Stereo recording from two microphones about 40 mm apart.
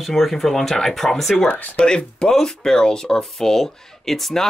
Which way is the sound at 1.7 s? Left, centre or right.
Left.